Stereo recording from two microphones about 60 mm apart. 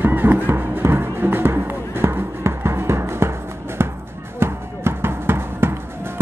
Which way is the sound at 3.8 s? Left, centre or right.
Right.